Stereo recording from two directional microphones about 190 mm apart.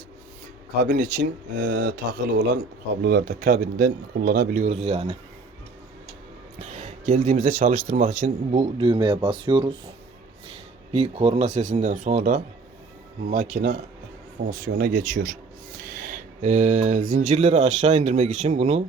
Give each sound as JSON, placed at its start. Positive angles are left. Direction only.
{"t": 0.8, "sound": "speech", "side_deg": -60}
{"t": 6.6, "sound": "a sound", "side_deg": -40}
{"t": 7.9, "sound": "speech", "side_deg": -40}
{"t": 8.8, "sound": "speech", "side_deg": -25}
{"t": 15.9, "sound": "speech", "side_deg": -50}